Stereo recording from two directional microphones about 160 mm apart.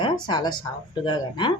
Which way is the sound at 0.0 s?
25° left (ahead or behind).